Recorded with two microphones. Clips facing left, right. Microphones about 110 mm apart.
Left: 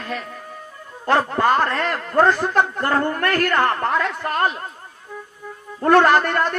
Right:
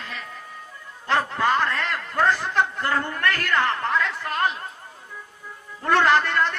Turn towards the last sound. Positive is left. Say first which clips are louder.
# left 3 dB
turn(degrees=50)  # may be behind; listen again after turning